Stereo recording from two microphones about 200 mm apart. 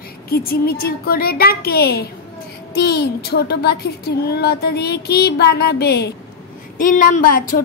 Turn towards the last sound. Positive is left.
turn(degrees=45)  # may be behind; listen again after turning